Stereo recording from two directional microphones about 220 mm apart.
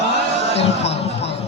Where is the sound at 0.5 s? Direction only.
30° left (ahead or behind).